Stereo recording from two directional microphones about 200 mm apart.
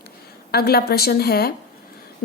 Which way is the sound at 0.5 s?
50° left (ahead or behind).